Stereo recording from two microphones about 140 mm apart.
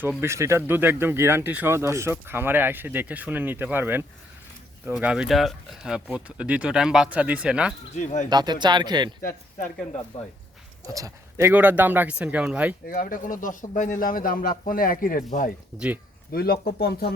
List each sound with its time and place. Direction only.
0.2 s speech: 20° right (ahead or behind)
7.9 s speech: 60° left (ahead or behind)
8.3 s speech: 30° right (ahead or behind)
10.8 s speech: 25° right (ahead or behind); by 12.7 s 10° right (ahead or behind)
12.9 s speech: 75° left (ahead or behind)